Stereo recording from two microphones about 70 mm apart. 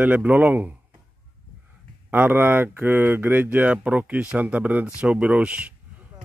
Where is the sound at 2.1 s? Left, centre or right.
Right.